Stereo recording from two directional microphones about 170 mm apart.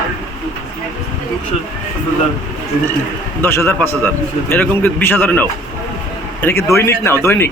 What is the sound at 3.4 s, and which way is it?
A man's voice, 15° left (ahead or behind).